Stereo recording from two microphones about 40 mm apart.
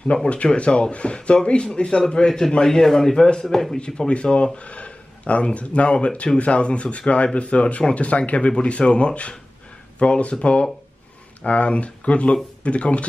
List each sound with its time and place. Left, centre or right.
0.1 s a man's voice: left; by 3.8 s centre
4.1 s speech: left